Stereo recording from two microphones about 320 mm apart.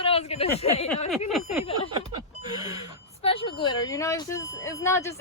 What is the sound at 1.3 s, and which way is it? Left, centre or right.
Speech, centre.